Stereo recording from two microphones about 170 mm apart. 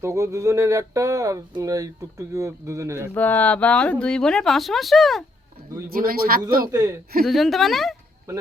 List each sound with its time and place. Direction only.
0.0 s speech: 15° right (ahead or behind)
3.2 s speech: 10° left (ahead or behind)
5.9 s speech: 60° right (ahead or behind)
6.7 s speech: 20° right (ahead or behind)
7.3 s speech: centre (ahead or behind)